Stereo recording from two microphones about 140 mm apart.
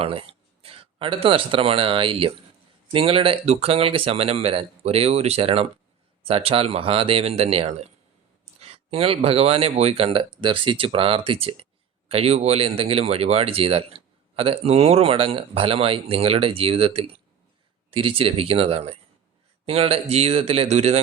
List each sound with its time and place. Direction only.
0.0 s speech: 40° right (ahead or behind)